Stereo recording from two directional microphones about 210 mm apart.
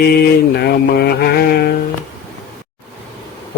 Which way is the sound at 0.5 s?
50° left (ahead or behind).